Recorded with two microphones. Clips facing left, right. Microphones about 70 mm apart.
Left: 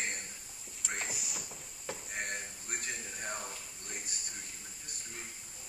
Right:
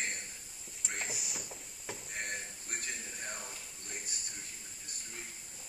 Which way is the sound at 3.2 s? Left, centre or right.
Centre.